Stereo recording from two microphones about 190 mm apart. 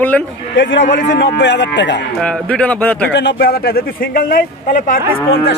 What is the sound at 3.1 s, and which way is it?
Speech, 60° left (ahead or behind).